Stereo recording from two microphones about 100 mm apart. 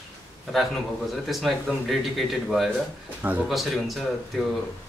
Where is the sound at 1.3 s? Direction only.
Centre (ahead or behind).